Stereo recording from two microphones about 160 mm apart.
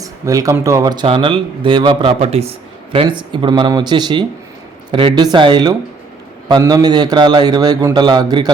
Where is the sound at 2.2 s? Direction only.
40° right (ahead or behind).